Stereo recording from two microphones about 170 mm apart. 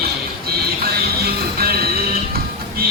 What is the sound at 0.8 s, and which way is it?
Music, 65° right (ahead or behind).